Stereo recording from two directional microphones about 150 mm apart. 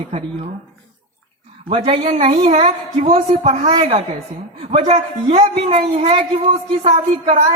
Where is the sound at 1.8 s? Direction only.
40° right (ahead or behind).